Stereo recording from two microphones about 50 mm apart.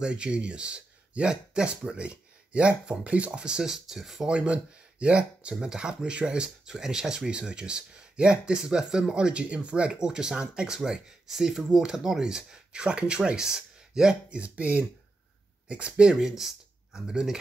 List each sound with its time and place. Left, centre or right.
0.0 s speech: centre
4.3 s speech: right
14.4 s speech: right; by 17.4 s centre